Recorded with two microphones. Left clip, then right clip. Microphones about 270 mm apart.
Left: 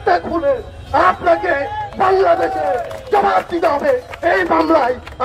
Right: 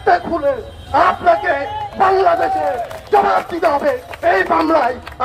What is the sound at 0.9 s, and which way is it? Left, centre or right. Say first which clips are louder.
Speech: even; left.